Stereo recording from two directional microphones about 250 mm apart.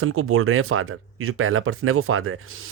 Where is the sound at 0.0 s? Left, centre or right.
Right.